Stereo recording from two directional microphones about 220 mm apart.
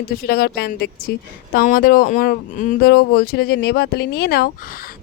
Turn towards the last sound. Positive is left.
turn(degrees=45)  # may be behind; listen again after turning